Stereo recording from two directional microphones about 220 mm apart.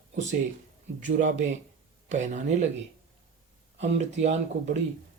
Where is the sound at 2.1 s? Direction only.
30° right (ahead or behind).